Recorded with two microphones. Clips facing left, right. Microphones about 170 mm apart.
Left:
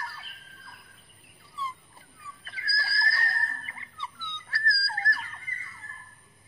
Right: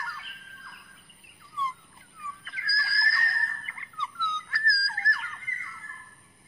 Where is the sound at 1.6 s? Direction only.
35° left (ahead or behind).